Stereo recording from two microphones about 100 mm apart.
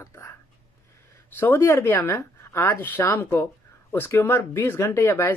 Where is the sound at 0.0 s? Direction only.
30° left (ahead or behind).